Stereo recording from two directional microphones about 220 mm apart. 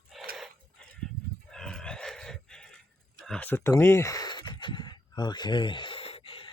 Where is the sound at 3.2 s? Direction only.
5° left (ahead or behind).